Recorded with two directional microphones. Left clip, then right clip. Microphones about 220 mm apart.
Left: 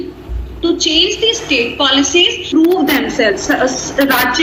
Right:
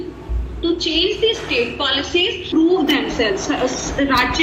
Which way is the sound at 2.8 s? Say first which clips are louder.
Left 4 dB; 35° left (ahead or behind).